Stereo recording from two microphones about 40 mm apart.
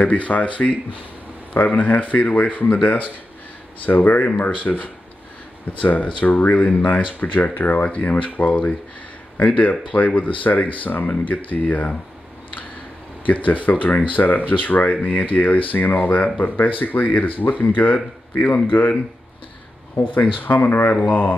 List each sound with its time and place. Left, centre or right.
0.0 s speech: left
13.3 s speech: left
17.9 s a man's voice: left
18.5 s speech: left
20.4 s speech: left